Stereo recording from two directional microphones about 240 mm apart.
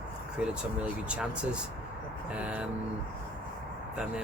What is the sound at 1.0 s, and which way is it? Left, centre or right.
Speech, centre.